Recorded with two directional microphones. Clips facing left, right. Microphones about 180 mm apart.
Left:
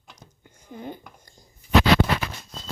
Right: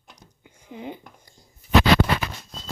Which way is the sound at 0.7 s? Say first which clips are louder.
Right 1 dB; 10° right (ahead or behind).